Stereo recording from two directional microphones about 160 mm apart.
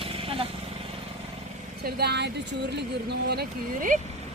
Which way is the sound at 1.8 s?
85° right.